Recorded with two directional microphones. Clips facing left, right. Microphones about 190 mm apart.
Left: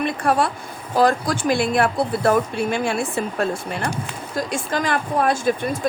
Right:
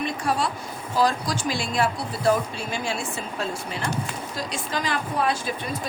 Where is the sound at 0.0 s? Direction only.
55° left (ahead or behind).